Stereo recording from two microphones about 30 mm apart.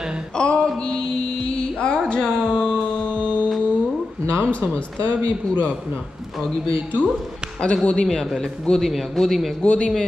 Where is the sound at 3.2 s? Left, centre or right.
Right.